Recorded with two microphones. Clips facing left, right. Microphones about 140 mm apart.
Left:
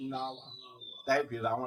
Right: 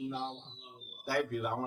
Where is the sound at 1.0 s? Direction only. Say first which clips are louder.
Left 3 dB; 20° right (ahead or behind).